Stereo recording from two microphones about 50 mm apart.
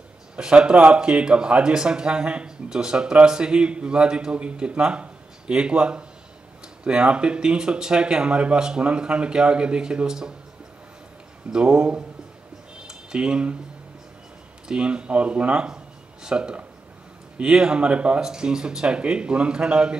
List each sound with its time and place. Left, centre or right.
0.4 s speech: centre
11.5 s speech: right
12.8 s a sound: centre
14.7 s speech: centre